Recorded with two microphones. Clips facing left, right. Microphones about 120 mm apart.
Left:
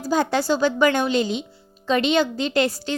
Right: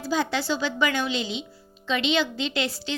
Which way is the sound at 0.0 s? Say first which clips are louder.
Left 5 dB; 45° left (ahead or behind).